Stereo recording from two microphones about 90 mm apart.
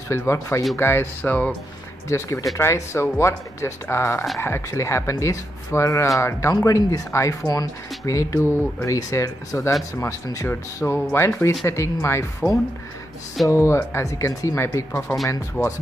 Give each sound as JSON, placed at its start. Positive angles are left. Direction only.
{"t": 0.3, "sound": "speech", "side_deg": 30}
{"t": 2.0, "sound": "speech", "side_deg": 35}
{"t": 10.4, "sound": "speech", "side_deg": 25}
{"t": 15.6, "sound": "speech", "side_deg": 0}